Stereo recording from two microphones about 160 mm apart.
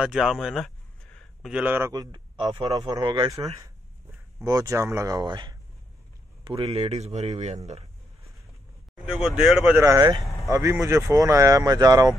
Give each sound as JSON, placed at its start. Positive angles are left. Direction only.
{"t": 0.0, "sound": "speech", "side_deg": -5}
{"t": 1.1, "sound": "a sound", "side_deg": 0}
{"t": 1.6, "sound": "a man's voice", "side_deg": -10}
{"t": 1.9, "sound": "a man's voice", "side_deg": -25}
{"t": 9.0, "sound": "speech", "side_deg": -5}
{"t": 9.8, "sound": "speech", "side_deg": -15}